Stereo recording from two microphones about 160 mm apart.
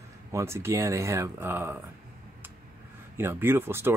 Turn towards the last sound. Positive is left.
turn(degrees=-15)  # may be behind; listen again after turning